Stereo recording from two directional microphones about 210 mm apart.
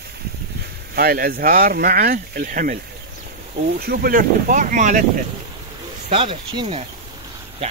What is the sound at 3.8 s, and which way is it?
Speech, 45° right (ahead or behind).